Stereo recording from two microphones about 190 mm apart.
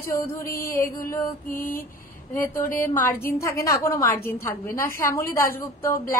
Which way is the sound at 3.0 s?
10° left (ahead or behind).